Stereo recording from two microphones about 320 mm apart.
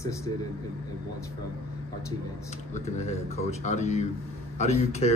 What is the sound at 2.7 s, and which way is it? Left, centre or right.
Speech, centre.